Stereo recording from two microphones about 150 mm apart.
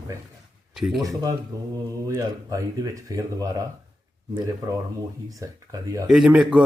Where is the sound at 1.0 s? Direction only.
20° right (ahead or behind).